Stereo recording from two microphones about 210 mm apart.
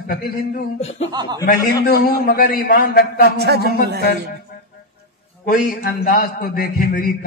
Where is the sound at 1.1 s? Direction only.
20° right (ahead or behind).